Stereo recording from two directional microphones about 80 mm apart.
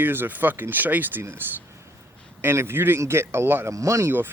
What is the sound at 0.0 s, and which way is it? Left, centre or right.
Speech, right.